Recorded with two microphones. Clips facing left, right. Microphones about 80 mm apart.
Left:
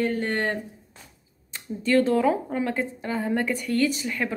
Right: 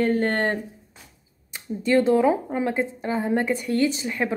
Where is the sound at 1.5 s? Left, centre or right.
Centre.